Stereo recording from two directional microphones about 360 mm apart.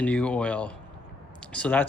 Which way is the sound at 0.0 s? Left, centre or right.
Centre.